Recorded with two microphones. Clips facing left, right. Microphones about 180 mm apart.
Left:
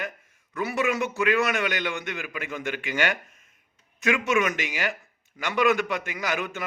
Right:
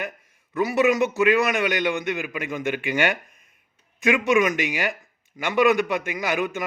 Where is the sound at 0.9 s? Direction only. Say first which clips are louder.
Right 4 dB; 15° right (ahead or behind).